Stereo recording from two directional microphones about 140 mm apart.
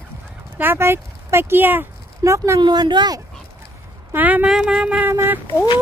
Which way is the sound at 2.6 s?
30° right (ahead or behind).